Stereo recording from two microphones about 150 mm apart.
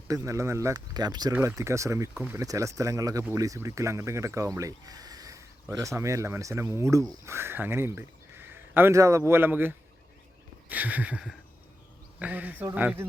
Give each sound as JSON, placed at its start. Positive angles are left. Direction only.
{"t": 0.1, "sound": "speech", "side_deg": -20}